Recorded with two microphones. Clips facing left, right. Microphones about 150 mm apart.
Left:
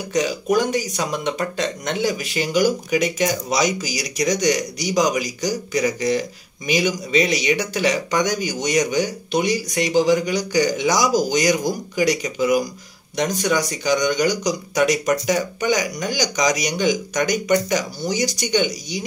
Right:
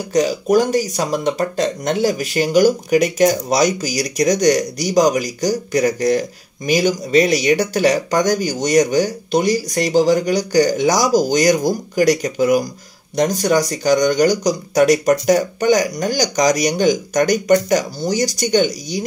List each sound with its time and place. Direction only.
0.1 s speech: 40° right (ahead or behind)